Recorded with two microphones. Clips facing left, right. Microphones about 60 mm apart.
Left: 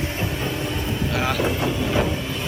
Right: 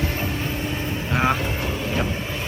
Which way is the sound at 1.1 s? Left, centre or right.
Right.